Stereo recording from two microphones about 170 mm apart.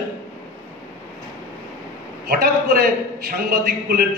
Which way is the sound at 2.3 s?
60° right (ahead or behind).